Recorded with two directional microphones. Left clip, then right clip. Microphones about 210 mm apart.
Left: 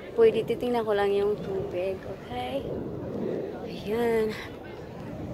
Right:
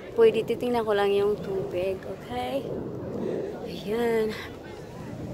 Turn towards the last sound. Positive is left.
turn(degrees=-5)  # may be behind; listen again after turning